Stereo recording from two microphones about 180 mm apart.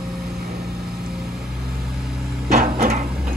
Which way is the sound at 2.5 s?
55° right (ahead or behind).